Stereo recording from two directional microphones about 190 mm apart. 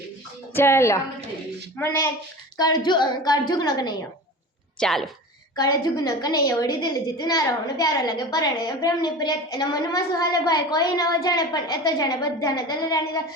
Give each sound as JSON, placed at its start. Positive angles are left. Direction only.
{"t": 0.5, "sound": "a woman's voice", "side_deg": 15}
{"t": 2.6, "sound": "a woman's voice", "side_deg": 20}
{"t": 4.8, "sound": "a woman's voice", "side_deg": 0}
{"t": 5.5, "sound": "a woman's voice", "side_deg": 20}